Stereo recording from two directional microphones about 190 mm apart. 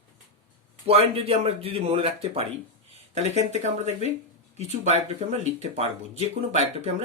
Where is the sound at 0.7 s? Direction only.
30° right (ahead or behind).